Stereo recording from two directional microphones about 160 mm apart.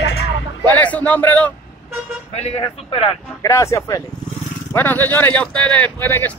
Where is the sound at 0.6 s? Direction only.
10° left (ahead or behind).